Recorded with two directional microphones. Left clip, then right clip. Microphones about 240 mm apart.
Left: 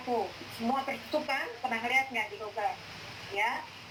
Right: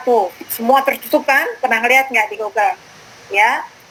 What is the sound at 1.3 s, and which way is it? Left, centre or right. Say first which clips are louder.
Speech: right 18 dB; right.